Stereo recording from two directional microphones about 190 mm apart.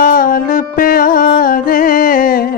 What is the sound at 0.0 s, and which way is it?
Music, 45° left (ahead or behind).